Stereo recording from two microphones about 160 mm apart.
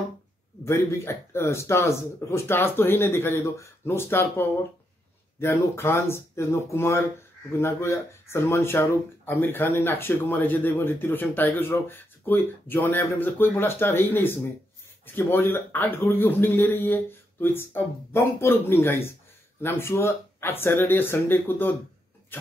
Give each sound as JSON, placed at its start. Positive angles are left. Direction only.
{"t": 0.7, "sound": "speech", "side_deg": 15}
{"t": 22.3, "sound": "vehicle", "side_deg": 10}